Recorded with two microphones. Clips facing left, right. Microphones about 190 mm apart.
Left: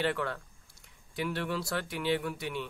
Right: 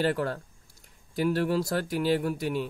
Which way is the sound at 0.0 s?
40° right (ahead or behind).